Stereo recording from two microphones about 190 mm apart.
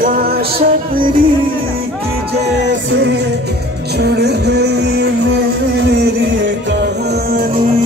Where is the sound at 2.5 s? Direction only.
65° right (ahead or behind).